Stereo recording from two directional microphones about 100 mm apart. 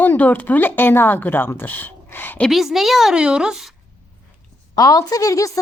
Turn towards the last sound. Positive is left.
turn(degrees=35)  # may be behind; listen again after turning